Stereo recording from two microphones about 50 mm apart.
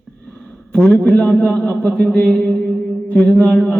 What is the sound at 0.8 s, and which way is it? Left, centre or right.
A man's voice, left.